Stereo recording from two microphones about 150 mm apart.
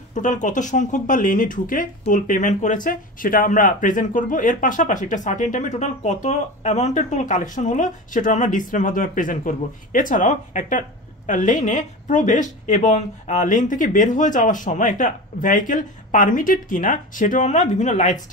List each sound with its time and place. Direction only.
0.1 s speech: 55° left (ahead or behind)